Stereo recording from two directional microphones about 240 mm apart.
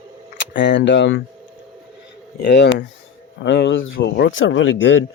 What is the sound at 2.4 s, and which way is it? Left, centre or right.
Speech, left.